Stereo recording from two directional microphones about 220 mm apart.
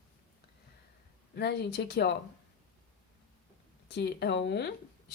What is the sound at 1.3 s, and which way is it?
Speech, 50° left (ahead or behind).